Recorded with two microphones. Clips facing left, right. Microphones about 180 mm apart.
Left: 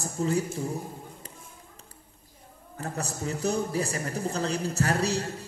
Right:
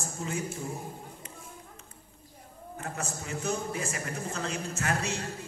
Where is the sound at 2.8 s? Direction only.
35° left (ahead or behind).